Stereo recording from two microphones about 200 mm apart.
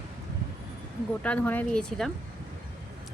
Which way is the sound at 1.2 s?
10° left (ahead or behind).